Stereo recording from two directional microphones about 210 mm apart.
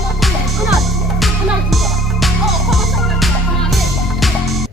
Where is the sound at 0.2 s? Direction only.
Centre (ahead or behind).